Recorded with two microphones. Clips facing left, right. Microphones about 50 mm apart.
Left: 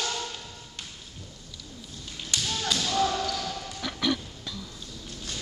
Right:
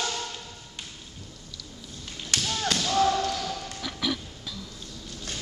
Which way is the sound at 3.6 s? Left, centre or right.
Centre.